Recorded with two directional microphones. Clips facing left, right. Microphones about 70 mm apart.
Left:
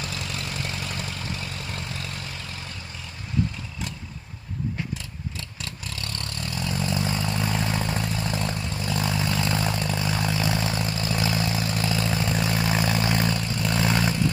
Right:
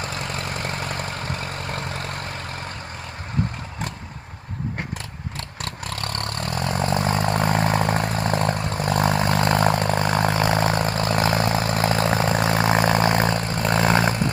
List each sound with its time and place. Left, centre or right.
0.0 s vehicle: right
5.4 s vehicle: right